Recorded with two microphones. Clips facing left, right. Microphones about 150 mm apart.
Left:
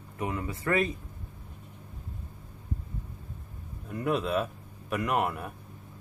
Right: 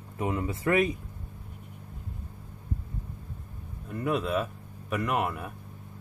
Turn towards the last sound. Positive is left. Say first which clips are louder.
# even
turn(degrees=0)  # may be behind; listen again after turning